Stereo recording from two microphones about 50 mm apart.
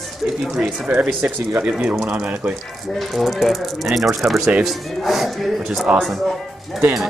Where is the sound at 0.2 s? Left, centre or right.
Centre.